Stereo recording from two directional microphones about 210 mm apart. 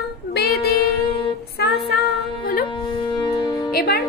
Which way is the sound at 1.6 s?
50° left (ahead or behind).